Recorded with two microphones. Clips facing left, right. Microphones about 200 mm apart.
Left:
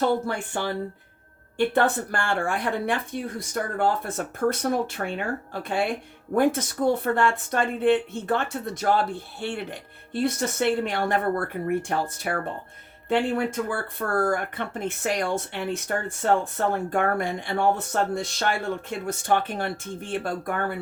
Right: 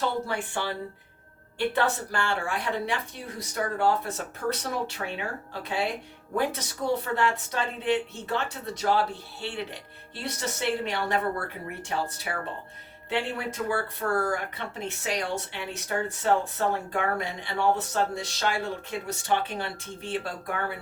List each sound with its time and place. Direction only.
0.0 s speech: 50° left (ahead or behind)
6.3 s speech: 50° left (ahead or behind)